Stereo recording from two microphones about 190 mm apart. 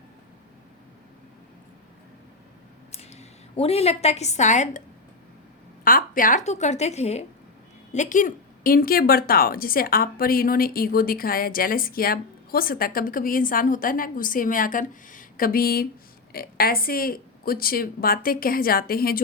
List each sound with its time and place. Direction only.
2.9 s a woman's voice: 35° left (ahead or behind)
5.8 s a woman's voice: 50° left (ahead or behind)